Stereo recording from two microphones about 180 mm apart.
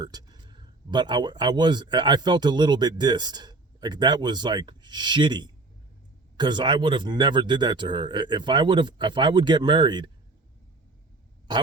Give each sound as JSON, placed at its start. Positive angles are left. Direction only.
{"t": 0.0, "sound": "speech", "side_deg": -20}